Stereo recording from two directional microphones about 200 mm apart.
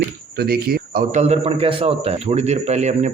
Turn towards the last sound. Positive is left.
turn(degrees=-35)  # may be behind; listen again after turning